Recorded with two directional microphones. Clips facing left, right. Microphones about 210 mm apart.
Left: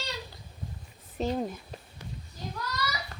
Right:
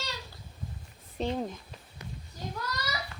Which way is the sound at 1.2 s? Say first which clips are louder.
Left 2 dB; 5° left (ahead or behind).